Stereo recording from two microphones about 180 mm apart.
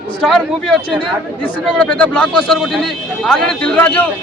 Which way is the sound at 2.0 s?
5° left (ahead or behind).